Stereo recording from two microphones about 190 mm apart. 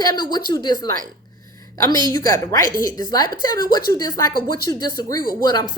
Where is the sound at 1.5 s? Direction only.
20° left (ahead or behind).